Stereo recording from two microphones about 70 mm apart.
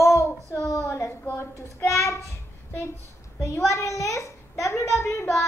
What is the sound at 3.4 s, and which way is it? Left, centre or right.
A child's voice, left.